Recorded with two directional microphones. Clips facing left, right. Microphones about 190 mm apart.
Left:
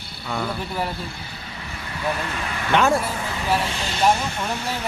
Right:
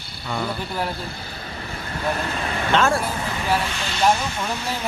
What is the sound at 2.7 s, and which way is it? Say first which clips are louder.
Speech: left 1 dB; 15° left (ahead or behind).